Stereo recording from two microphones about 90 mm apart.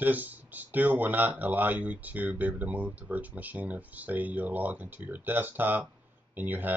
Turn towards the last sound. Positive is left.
turn(degrees=-20)  # may be behind; listen again after turning